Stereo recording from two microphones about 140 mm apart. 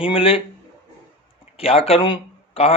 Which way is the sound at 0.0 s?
40° left (ahead or behind).